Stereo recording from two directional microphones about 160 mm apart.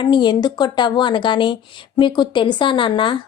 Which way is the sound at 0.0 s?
30° left (ahead or behind).